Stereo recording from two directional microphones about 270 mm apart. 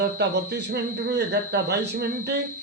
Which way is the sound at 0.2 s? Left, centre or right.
Right.